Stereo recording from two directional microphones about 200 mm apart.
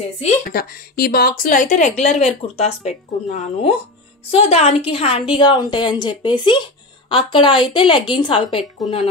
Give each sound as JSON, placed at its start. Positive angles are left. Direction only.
{"t": 0.5, "sound": "a woman's voice", "side_deg": 50}